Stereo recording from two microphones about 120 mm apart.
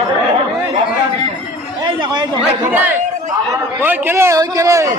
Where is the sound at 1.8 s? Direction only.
40° right (ahead or behind).